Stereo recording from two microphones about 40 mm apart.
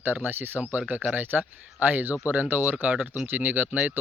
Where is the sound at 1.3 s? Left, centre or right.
Right.